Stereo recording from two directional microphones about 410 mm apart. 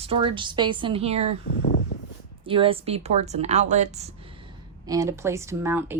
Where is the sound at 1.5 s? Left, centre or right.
Left.